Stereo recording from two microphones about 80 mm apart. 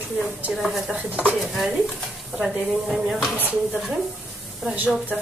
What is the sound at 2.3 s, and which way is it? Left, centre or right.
Speech, centre.